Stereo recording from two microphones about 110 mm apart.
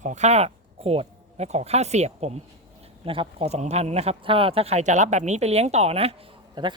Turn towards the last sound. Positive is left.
turn(degrees=-45)  # may be behind; listen again after turning